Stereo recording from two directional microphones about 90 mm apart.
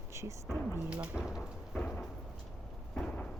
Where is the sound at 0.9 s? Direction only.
10° right (ahead or behind).